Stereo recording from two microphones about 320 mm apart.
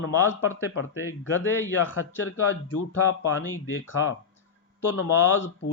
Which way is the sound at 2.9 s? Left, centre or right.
Left.